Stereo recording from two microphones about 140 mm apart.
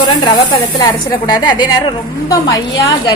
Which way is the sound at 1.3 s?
30° left (ahead or behind).